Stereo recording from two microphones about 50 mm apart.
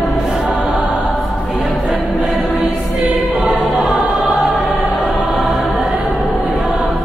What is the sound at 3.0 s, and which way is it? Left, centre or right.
Choir, right.